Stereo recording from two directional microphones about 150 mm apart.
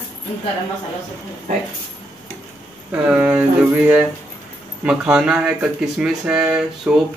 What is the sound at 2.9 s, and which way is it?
Speech, 10° right (ahead or behind).